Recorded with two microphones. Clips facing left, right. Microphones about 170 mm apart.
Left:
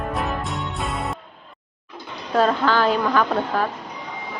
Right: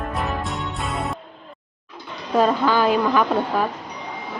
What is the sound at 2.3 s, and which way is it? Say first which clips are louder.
Speech: right 1 dB; 10° right (ahead or behind).